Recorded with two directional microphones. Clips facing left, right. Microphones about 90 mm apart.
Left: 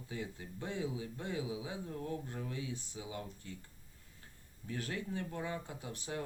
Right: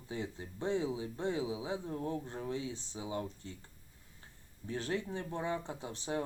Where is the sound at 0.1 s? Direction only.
25° right (ahead or behind).